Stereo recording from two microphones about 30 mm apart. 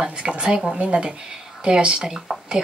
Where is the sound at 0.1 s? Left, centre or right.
Right.